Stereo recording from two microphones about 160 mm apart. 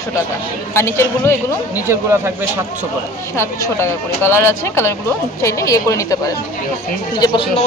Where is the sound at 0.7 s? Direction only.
15° left (ahead or behind).